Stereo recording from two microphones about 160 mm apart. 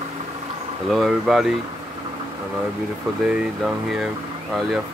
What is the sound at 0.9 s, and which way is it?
Speech, centre (ahead or behind).